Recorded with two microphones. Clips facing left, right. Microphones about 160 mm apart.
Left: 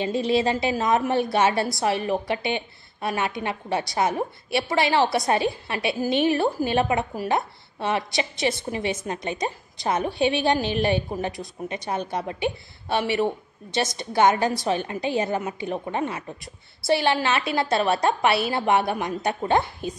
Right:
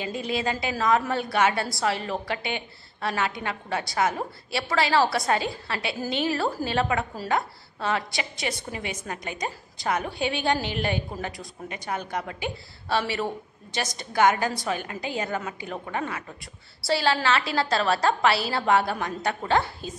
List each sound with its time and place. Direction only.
0.0 s a woman's voice: 25° left (ahead or behind)